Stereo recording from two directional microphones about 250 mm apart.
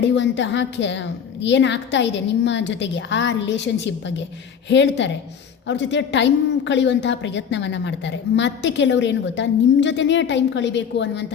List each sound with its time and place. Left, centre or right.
0.0 s a woman's voice: left